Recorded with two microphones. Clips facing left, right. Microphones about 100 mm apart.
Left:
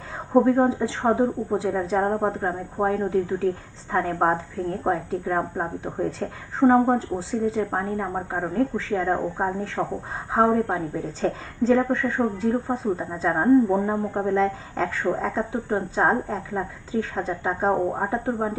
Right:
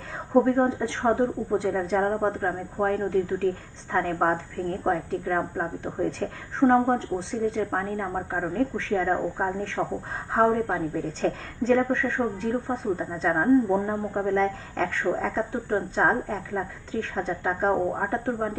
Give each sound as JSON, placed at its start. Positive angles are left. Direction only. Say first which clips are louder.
{"t": 0.3, "sound": "speech", "louder": "left 2 dB", "side_deg": 5}
{"t": 9.8, "sound": "a woman's voice", "louder": "left 1 dB", "side_deg": 10}
{"t": 10.7, "sound": "a woman's voice", "louder": "left 1 dB", "side_deg": 15}
{"t": 11.0, "sound": "a woman's voice", "louder": "left 1 dB", "side_deg": 0}
{"t": 14.3, "sound": "speech", "louder": "left 1 dB", "side_deg": 0}
{"t": 17.7, "sound": "a woman's voice", "louder": "left 2 dB", "side_deg": 15}